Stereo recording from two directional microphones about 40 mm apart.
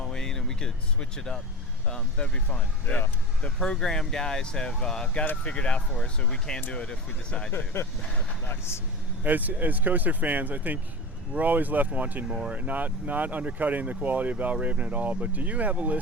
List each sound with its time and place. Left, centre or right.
0.0 s a sound: centre
1.9 s speech: centre
7.7 s speech: left
9.2 s speech: right